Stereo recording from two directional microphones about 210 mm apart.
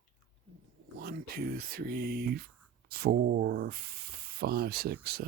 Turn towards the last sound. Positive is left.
turn(degrees=-45)  # may be behind; listen again after turning